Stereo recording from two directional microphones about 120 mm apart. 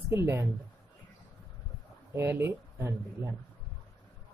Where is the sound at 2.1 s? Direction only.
20° right (ahead or behind).